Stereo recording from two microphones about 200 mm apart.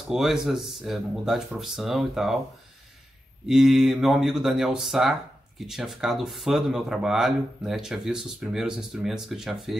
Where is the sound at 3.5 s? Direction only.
Centre (ahead or behind).